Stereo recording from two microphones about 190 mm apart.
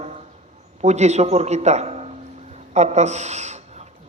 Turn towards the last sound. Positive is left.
turn(degrees=-35)  # may be behind; listen again after turning